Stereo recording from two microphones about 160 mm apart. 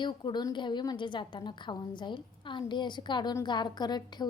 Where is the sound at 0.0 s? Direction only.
30° left (ahead or behind).